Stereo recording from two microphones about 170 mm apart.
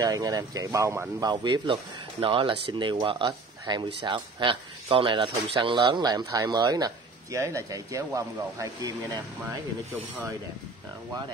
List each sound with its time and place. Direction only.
0.0 s speech: 25° right (ahead or behind)
1.3 s speech: 25° right (ahead or behind)